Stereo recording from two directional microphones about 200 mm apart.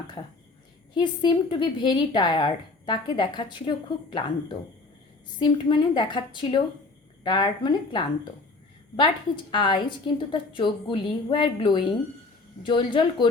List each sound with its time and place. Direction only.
0.9 s a woman's voice: 20° left (ahead or behind)